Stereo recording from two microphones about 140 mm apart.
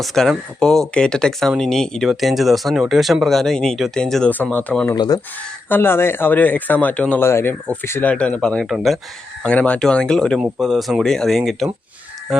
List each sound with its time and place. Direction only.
0.0 s speech: centre (ahead or behind)
4.9 s speech: 30° left (ahead or behind)
5.6 s speech: 15° left (ahead or behind)